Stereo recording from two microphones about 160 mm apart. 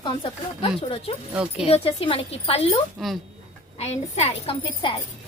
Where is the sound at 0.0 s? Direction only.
30° left (ahead or behind).